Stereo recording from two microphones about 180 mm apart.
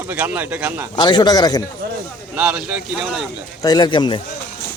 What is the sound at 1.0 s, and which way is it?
Speech, 25° left (ahead or behind).